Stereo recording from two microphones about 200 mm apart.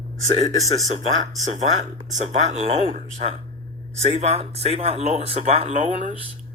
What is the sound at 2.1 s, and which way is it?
Speech, 35° right (ahead or behind).